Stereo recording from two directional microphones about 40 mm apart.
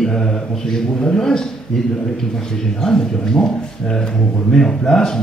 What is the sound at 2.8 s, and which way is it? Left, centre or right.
Speech, centre.